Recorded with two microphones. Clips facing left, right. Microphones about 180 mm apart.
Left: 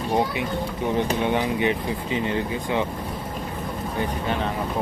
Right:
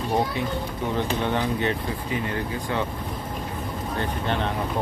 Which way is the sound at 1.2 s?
15° left (ahead or behind).